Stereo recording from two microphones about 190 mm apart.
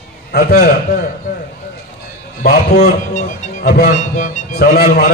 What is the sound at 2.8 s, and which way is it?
A man's voice, 40° left (ahead or behind).